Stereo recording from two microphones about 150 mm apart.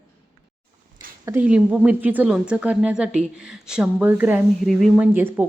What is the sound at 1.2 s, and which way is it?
A woman's voice, 10° right (ahead or behind).